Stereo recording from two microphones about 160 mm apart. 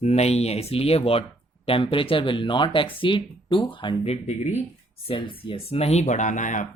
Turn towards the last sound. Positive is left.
turn(degrees=50)  # may be behind; listen again after turning